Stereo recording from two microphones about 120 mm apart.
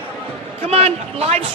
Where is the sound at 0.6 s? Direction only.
60° right (ahead or behind).